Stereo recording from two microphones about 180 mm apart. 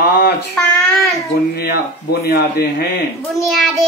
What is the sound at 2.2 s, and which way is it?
Speech, 60° left (ahead or behind).